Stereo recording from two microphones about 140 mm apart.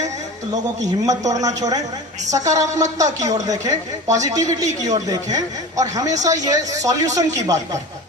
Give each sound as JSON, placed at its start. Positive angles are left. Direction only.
{"t": 0.8, "sound": "speech", "side_deg": -25}